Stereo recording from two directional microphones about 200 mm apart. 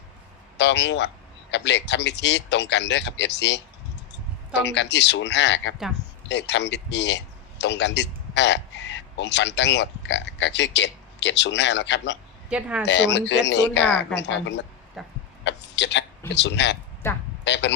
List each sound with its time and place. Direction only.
0.5 s a man's voice: 60° left (ahead or behind)
12.5 s speech: 5° right (ahead or behind)
12.8 s speech: 60° left (ahead or behind)
15.0 s a sound: centre (ahead or behind)
15.4 s a man's voice: 60° left (ahead or behind)